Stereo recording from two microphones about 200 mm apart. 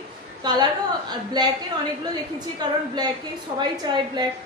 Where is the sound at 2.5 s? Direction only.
20° right (ahead or behind).